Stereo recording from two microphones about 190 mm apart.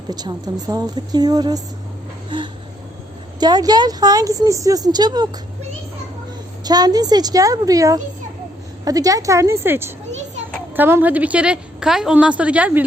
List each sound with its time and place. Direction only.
0.1 s a woman's voice: 20° right (ahead or behind)
3.4 s a woman's voice: 20° right (ahead or behind)
6.7 s a woman's voice: 20° right (ahead or behind)